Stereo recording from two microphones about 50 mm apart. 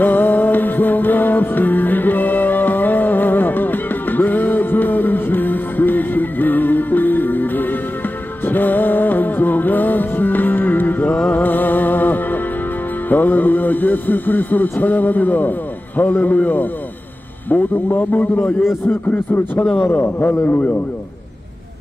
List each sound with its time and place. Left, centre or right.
0.0 s music: left
13.1 s a man's voice: left
20.4 s a man's voice: left